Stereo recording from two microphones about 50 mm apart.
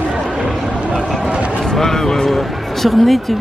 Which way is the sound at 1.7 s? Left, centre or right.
Centre.